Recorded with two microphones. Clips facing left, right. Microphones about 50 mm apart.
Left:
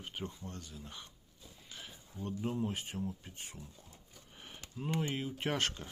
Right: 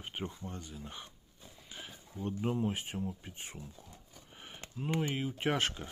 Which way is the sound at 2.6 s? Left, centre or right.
Centre.